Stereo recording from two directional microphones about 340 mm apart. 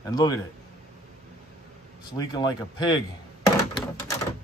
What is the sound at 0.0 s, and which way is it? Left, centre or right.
Speech, centre.